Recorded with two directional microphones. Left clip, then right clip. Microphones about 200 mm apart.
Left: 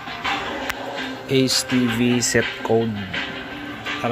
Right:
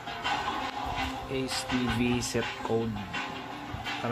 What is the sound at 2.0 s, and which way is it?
Speech, 15° left (ahead or behind).